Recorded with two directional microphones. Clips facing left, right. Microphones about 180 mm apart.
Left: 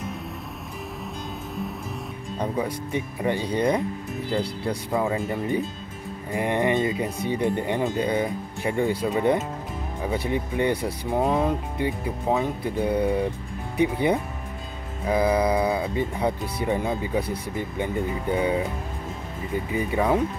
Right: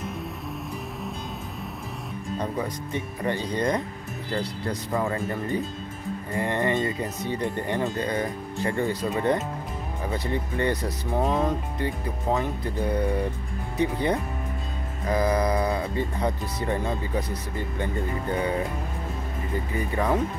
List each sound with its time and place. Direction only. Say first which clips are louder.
2.5 s speech: left 3 dB; 10° left (ahead or behind)
19.7 s speech: left 3 dB; 15° left (ahead or behind)